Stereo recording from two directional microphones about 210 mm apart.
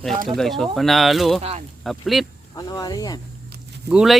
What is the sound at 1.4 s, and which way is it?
Speech, 30° right (ahead or behind).